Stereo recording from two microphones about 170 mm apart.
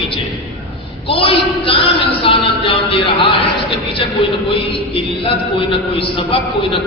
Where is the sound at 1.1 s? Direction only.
30° left (ahead or behind).